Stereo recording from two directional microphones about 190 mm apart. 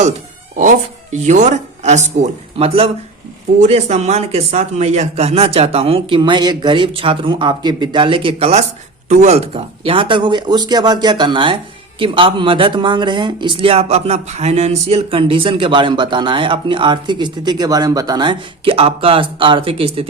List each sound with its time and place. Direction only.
1.1 s speech: 40° right (ahead or behind)